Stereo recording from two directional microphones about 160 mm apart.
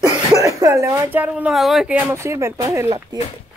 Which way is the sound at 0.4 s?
20° right (ahead or behind).